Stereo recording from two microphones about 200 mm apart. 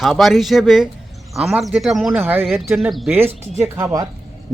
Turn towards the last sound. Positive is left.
turn(degrees=-15)  # may be behind; listen again after turning